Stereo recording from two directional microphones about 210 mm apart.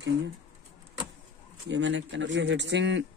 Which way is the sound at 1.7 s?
60° right (ahead or behind).